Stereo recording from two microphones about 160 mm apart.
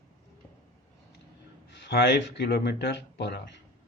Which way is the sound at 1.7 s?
90° left.